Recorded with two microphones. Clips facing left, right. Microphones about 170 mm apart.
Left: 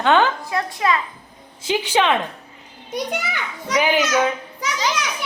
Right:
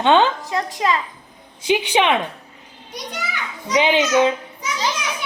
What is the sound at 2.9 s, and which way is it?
Speech, 50° left (ahead or behind).